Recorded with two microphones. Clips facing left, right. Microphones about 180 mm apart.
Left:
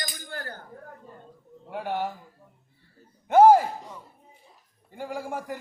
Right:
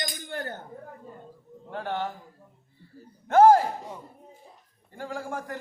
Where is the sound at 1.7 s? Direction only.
10° left (ahead or behind).